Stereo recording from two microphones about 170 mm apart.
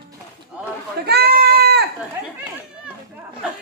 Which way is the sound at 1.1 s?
70° right (ahead or behind).